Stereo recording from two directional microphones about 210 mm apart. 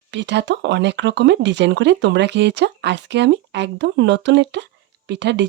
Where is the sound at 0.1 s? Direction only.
55° right (ahead or behind).